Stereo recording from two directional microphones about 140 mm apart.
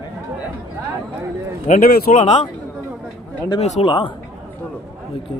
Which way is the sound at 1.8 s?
90° left.